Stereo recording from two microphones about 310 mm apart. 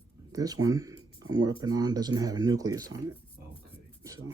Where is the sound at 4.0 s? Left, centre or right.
Centre.